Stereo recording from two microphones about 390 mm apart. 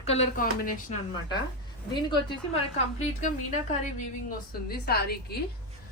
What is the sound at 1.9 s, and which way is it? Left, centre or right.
Speech, centre.